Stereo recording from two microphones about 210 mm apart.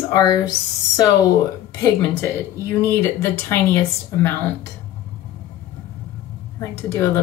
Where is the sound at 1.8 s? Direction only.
15° left (ahead or behind).